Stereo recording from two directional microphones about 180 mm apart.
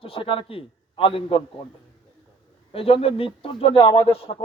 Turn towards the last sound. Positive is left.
turn(degrees=35)  # may be behind; listen again after turning